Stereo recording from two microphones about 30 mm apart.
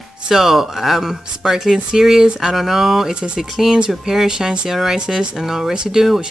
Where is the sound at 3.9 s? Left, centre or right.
Centre.